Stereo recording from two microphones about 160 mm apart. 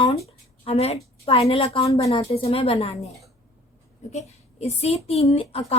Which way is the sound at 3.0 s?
Centre (ahead or behind).